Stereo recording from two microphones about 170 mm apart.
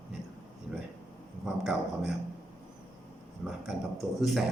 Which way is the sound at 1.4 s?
5° right (ahead or behind).